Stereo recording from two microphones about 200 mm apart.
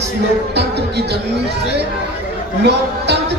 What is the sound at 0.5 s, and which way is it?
Speech, 55° right (ahead or behind).